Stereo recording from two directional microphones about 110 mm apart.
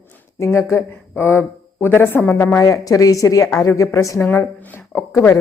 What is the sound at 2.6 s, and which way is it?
A woman's voice, 30° left (ahead or behind).